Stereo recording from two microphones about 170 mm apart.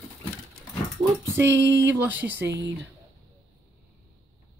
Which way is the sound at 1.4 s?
15° right (ahead or behind).